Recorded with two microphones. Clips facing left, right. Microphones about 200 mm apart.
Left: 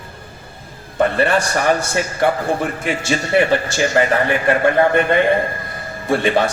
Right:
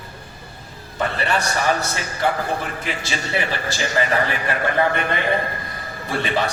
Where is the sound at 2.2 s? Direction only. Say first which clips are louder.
Left 4 dB; 50° left (ahead or behind).